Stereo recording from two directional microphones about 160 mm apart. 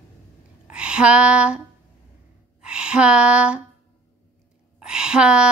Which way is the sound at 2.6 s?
5° right (ahead or behind).